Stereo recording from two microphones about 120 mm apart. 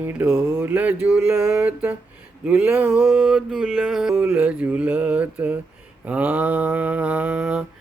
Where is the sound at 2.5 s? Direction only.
10° right (ahead or behind).